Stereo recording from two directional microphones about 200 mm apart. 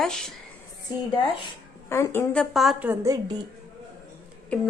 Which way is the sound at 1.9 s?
15° left (ahead or behind).